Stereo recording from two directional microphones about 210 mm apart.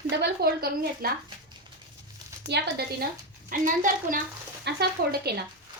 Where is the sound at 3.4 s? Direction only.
40° right (ahead or behind).